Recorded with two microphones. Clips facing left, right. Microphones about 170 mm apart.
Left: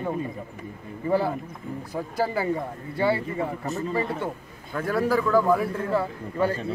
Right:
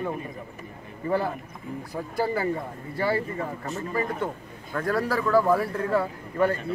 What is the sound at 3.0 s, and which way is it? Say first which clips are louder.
Speech: left 2 dB; 25° left (ahead or behind).